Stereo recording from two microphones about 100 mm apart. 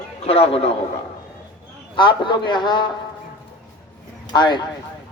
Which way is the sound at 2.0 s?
50° left (ahead or behind).